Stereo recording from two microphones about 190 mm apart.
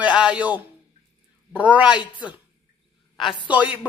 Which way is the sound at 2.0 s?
25° left (ahead or behind).